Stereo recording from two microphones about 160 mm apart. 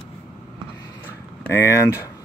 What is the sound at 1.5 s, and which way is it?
Speech, 20° left (ahead or behind).